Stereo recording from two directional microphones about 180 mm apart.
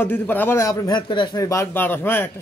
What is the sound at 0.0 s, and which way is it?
A man's voice, 10° left (ahead or behind).